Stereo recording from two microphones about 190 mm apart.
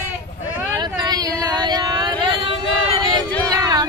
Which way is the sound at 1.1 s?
20° right (ahead or behind).